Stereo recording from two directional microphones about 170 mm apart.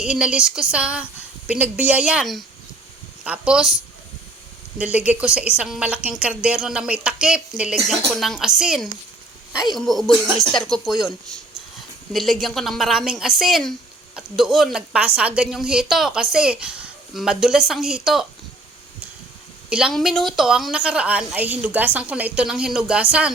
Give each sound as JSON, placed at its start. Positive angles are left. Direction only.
{"t": 0.0, "sound": "a woman's voice", "side_deg": -5}
{"t": 4.8, "sound": "a woman's voice", "side_deg": -10}
{"t": 12.1, "sound": "a woman's voice", "side_deg": 0}
{"t": 19.7, "sound": "a woman's voice", "side_deg": 0}